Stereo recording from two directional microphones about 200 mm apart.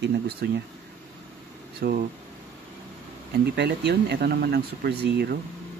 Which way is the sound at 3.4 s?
55° right (ahead or behind).